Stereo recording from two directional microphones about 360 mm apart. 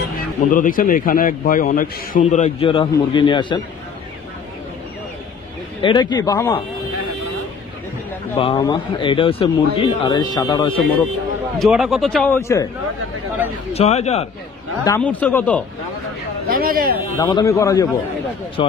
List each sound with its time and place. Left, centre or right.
0.5 s a man's voice: left
5.8 s speech: centre
8.4 s speech: centre
11.5 s a man's voice: centre
13.7 s speech: centre
14.9 s a man's voice: centre
16.4 s speech: right
17.2 s speech: centre